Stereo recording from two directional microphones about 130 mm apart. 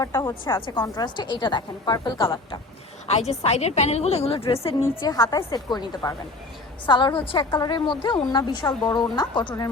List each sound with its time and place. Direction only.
0.0 s a woman's voice: 25° left (ahead or behind); by 2.6 s 40° left (ahead or behind)
3.1 s a woman's voice: 55° left (ahead or behind)
5.2 s a woman's voice: 20° left (ahead or behind)
5.5 s a woman's voice: 30° left (ahead or behind)